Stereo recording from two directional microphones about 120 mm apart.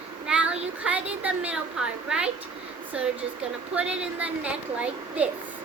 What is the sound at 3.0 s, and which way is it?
A woman's voice, 10° right (ahead or behind).